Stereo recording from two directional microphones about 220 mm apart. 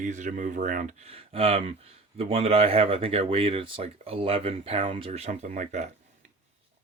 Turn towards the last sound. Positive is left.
turn(degrees=-35)  # may be behind; listen again after turning